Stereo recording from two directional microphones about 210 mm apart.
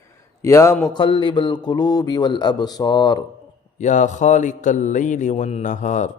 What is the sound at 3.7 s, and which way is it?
Speech, 35° left (ahead or behind).